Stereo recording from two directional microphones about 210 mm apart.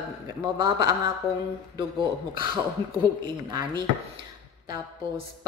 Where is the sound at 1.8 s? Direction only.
25° right (ahead or behind).